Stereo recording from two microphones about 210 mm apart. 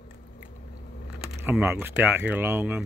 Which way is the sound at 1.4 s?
5° right (ahead or behind).